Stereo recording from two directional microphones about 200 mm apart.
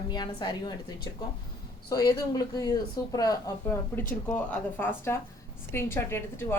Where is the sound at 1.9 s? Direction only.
20° left (ahead or behind).